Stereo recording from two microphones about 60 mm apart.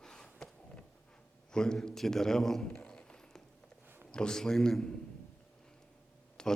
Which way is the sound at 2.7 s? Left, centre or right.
Centre.